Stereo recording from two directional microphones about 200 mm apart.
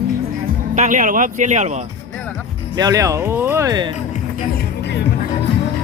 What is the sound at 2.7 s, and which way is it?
Speech, 20° right (ahead or behind).